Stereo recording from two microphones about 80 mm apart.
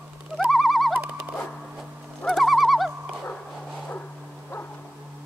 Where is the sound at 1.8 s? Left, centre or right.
Centre.